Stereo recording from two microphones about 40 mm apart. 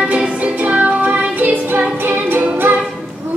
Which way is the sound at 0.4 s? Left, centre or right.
Right.